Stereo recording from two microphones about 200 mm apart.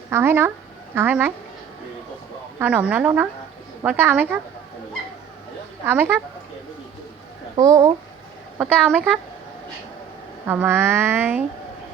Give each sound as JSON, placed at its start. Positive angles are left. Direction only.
{"t": 0.1, "sound": "speech", "side_deg": -10}
{"t": 2.6, "sound": "speech", "side_deg": -10}
{"t": 5.8, "sound": "speech", "side_deg": -10}
{"t": 7.5, "sound": "speech", "side_deg": -15}
{"t": 8.5, "sound": "a woman's voice", "side_deg": -5}
{"t": 10.4, "sound": "speech", "side_deg": -10}